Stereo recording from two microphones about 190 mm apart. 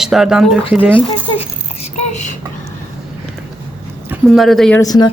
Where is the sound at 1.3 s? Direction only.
35° left (ahead or behind).